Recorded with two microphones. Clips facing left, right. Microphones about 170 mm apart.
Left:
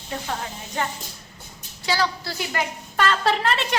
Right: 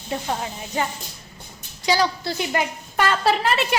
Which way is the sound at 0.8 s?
10° right (ahead or behind).